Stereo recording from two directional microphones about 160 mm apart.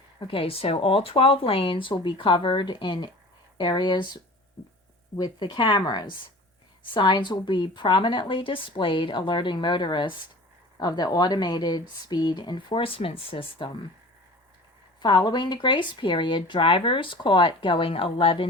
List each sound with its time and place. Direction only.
0.2 s speech: 35° left (ahead or behind)
15.0 s speech: 25° left (ahead or behind)